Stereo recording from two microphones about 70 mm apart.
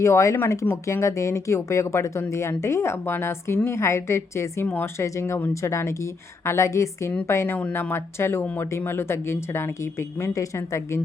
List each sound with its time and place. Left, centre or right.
0.0 s speech: left
4.6 s speech: left
4.9 s speech: left
7.5 s speech: left